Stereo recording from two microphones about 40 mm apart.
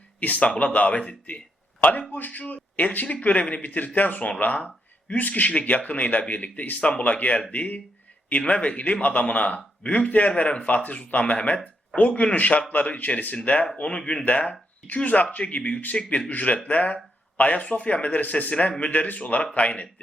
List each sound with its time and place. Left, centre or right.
0.2 s speech: left
1.8 s speech: left
13.7 s speech: left
14.3 s speech: left